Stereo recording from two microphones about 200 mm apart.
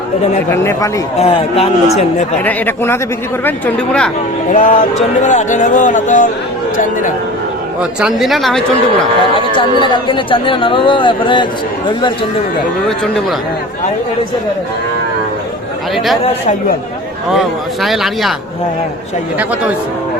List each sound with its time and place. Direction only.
0.5 s speech: 10° left (ahead or behind)
1.2 s speech: 30° left (ahead or behind)
2.4 s speech: 10° left (ahead or behind)
4.5 s speech: 45° left (ahead or behind)
7.8 s a man's voice: centre (ahead or behind)
9.8 s speech: 25° left (ahead or behind)
17.3 s a man's voice: centre (ahead or behind)
19.4 s a man's voice: 5° right (ahead or behind)